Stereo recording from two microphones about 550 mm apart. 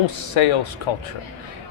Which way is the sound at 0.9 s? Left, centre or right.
Left.